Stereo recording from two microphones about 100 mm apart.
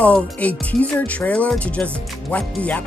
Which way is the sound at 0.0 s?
15° left (ahead or behind).